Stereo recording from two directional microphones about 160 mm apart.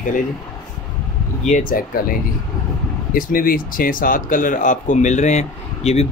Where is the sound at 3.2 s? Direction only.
60° left (ahead or behind).